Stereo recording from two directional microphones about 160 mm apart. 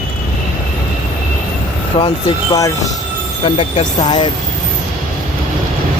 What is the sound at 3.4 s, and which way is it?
Speech, 35° left (ahead or behind).